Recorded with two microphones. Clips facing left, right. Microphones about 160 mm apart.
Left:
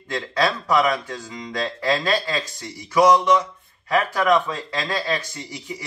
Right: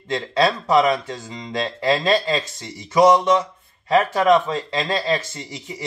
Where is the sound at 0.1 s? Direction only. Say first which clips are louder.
Right 3 dB; 25° right (ahead or behind).